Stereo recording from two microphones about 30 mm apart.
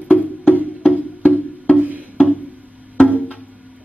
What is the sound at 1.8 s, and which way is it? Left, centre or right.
Wood block, right.